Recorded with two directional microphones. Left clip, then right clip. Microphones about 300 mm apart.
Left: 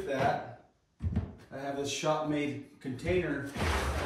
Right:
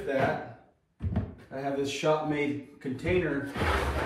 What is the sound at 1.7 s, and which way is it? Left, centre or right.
Speech, centre.